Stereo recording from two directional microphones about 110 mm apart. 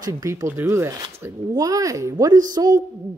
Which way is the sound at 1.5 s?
35° right (ahead or behind).